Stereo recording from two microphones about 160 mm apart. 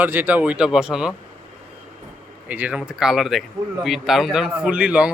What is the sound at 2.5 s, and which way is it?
A man's voice, 10° right (ahead or behind).